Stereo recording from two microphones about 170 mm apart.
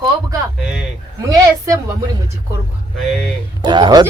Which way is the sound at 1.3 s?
20° right (ahead or behind).